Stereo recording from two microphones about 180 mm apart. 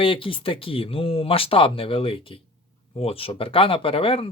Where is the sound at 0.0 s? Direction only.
30° left (ahead or behind).